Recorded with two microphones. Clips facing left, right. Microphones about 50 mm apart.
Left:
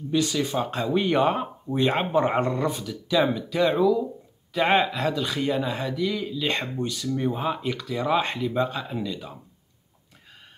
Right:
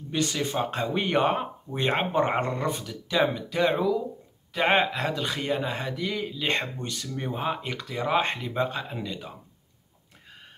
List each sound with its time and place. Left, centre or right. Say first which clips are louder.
0.1 s speech: left 3 dB; right
6.8 s speech: left 6 dB; right
7.3 s speech: left 2 dB; right